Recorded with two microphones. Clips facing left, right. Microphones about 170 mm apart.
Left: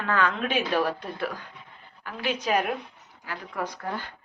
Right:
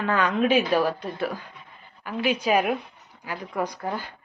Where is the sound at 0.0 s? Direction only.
15° right (ahead or behind).